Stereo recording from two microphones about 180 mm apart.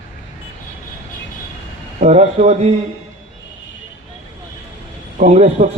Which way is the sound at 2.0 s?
40° right (ahead or behind).